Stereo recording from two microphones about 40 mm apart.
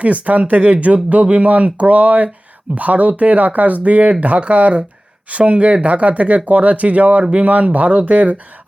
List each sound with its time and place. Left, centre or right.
0.0 s speech: right